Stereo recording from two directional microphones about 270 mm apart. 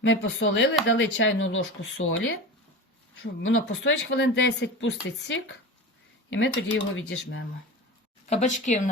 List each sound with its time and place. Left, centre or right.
0.0 s speech: left
8.3 s speech: left